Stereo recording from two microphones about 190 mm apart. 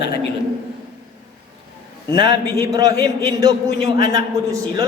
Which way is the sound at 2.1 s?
25° right (ahead or behind).